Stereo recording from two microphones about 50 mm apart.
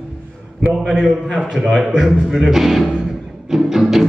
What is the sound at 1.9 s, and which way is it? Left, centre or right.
Speech, centre.